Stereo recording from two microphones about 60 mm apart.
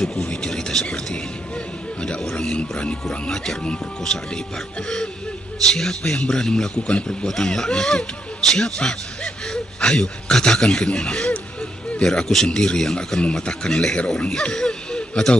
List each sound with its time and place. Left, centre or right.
0.0 s speech: centre
2.4 s speech: centre